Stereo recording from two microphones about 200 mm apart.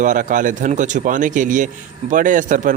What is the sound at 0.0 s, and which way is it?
Speech, 40° right (ahead or behind).